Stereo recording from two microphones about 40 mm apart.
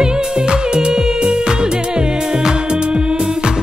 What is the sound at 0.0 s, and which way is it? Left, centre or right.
Music, centre.